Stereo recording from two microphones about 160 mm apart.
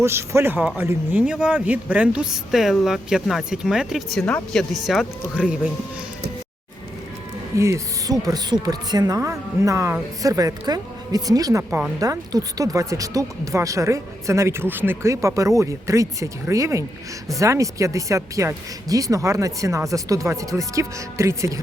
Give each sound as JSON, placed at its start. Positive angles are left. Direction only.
{"t": 0.0, "sound": "a man's voice", "side_deg": -15}
{"t": 7.5, "sound": "a woman's voice", "side_deg": -20}